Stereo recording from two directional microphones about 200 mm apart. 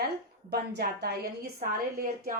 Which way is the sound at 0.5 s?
55° right (ahead or behind).